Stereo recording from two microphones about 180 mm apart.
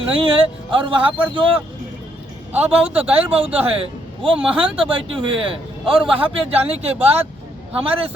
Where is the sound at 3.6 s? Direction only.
30° right (ahead or behind).